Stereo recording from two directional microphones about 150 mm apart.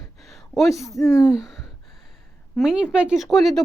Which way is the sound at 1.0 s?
15° left (ahead or behind).